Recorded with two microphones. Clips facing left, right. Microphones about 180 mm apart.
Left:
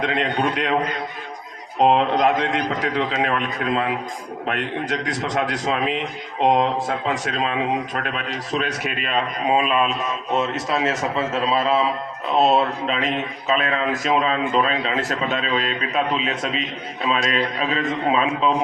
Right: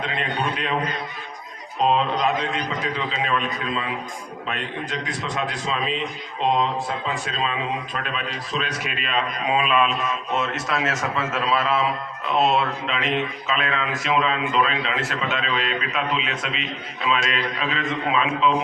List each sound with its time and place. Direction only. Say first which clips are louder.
0.0 s a man's voice: left 5 dB; 60° left (ahead or behind)
1.8 s a man's voice: left 4 dB; 65° left (ahead or behind)
5.3 s a man's voice: left 4 dB; 55° left (ahead or behind)
8.6 s a man's voice: left 3 dB; 45° left (ahead or behind)